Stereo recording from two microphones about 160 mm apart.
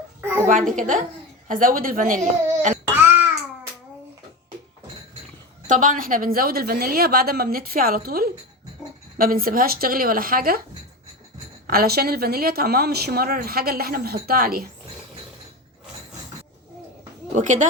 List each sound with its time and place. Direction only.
0.4 s a woman's voice: 55° right (ahead or behind)
5.6 s a woman's voice: 55° right (ahead or behind)
11.6 s a woman's voice: 70° right (ahead or behind)
17.3 s a woman's voice: 50° right (ahead or behind)